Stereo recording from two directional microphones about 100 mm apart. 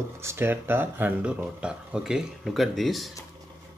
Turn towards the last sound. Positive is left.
turn(degrees=0)  # may be behind; listen again after turning